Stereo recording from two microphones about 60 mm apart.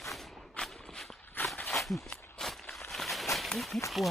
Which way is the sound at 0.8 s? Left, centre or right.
Centre.